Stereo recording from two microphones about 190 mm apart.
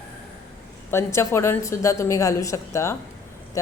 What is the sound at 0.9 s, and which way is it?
A woman's voice, 15° left (ahead or behind).